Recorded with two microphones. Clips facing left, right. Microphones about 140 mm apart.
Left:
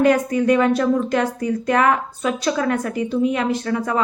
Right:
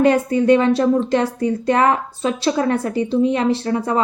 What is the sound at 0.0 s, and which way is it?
Speech, 30° right (ahead or behind).